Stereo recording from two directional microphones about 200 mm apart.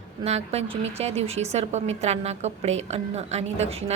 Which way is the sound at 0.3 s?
30° right (ahead or behind).